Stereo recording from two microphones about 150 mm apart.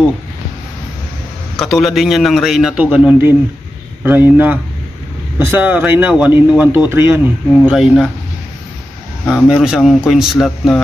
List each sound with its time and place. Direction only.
1.6 s a man's voice: centre (ahead or behind); by 7.2 s 15° right (ahead or behind)
7.6 s a man's voice: 5° right (ahead or behind)
9.2 s a man's voice: 5° left (ahead or behind)